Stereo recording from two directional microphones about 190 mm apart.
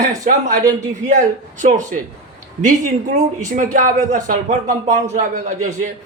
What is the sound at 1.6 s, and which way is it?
Speech, 40° right (ahead or behind).